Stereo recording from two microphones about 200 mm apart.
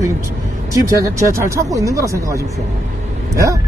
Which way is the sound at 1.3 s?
15° right (ahead or behind).